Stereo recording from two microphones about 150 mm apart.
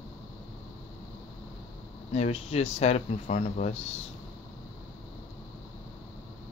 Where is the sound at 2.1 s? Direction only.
45° left (ahead or behind).